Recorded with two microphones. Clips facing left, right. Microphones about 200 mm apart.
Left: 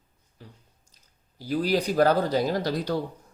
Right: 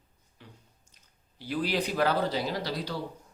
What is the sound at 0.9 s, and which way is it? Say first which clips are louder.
Speech: left 6 dB; 40° left (ahead or behind).